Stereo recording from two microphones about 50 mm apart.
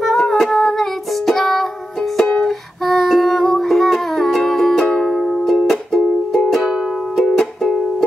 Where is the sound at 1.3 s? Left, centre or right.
Centre.